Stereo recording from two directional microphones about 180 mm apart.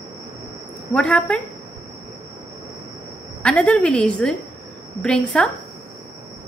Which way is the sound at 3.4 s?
5° left (ahead or behind).